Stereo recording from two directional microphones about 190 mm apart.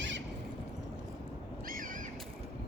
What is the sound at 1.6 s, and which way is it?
Crow, 50° right (ahead or behind).